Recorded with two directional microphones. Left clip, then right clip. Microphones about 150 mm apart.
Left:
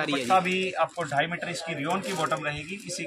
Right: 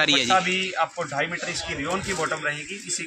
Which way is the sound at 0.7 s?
15° left (ahead or behind).